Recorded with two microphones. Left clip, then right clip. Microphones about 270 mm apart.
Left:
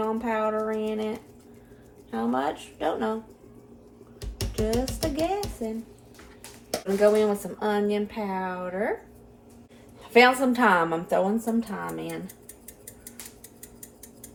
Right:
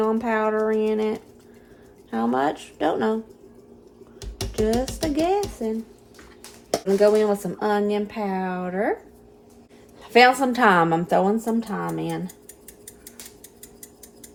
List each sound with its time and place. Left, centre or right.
0.0 s speech: right
4.6 s speech: right
6.7 s speech: right
10.0 s speech: right